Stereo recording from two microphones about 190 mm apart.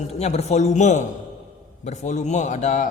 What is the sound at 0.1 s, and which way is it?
A man's voice, 35° left (ahead or behind).